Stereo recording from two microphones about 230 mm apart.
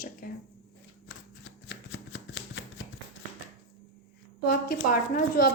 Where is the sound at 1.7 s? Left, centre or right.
Left.